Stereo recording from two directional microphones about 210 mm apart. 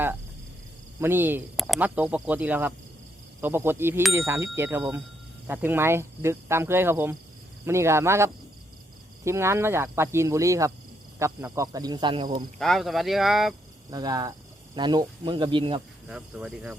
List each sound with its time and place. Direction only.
1.0 s speech: 10° right (ahead or behind)
12.5 s speech: centre (ahead or behind)
13.9 s speech: 20° right (ahead or behind)
16.0 s speech: 5° right (ahead or behind)